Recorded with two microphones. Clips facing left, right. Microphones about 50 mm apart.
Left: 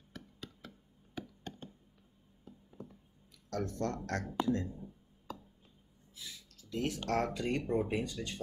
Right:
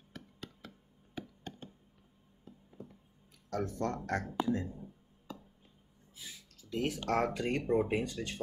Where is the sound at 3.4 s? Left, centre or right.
Centre.